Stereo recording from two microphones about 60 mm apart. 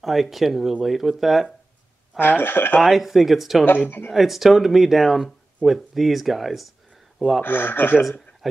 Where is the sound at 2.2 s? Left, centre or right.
Left.